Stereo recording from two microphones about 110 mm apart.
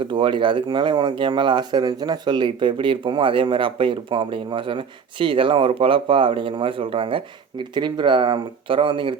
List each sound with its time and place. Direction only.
0.1 s speech: 50° right (ahead or behind)